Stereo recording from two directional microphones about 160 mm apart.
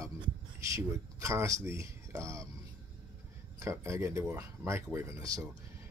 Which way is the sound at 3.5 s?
20° right (ahead or behind).